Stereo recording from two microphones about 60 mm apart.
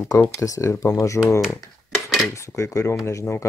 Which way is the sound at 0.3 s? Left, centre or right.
Left.